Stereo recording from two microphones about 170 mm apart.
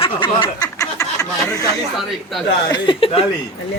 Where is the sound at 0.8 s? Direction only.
20° left (ahead or behind).